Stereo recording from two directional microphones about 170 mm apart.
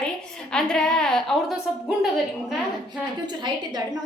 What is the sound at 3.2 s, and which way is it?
Speech, 25° right (ahead or behind).